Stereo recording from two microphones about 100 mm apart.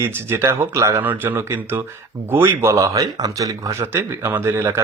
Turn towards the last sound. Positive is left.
turn(degrees=-25)  # may be behind; listen again after turning